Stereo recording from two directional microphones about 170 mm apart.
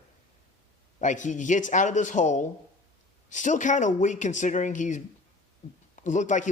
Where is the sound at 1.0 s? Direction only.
45° left (ahead or behind).